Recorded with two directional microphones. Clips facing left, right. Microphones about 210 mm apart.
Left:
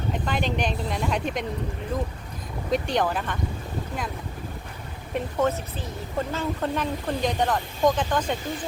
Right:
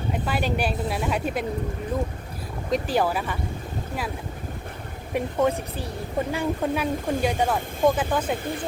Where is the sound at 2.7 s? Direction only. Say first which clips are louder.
Right 1 dB; 5° right (ahead or behind).